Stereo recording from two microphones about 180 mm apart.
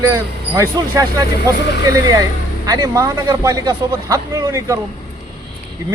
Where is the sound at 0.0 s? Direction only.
15° right (ahead or behind).